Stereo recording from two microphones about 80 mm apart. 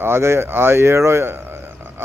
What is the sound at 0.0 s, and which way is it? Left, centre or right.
Speech, right.